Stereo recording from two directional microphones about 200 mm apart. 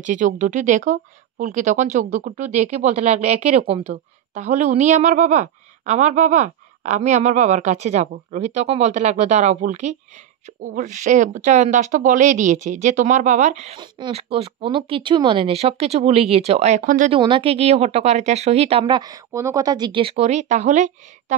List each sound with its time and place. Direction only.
0.0 s a woman's voice: 40° right (ahead or behind)
13.7 s speech: 25° right (ahead or behind); by 17.1 s 40° right (ahead or behind)
17.1 s a woman's voice: 25° right (ahead or behind)